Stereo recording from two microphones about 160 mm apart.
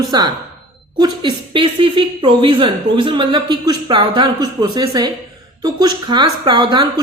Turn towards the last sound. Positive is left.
turn(degrees=-30)  # may be behind; listen again after turning